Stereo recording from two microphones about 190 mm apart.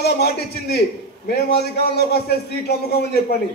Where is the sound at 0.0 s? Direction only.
60° left (ahead or behind).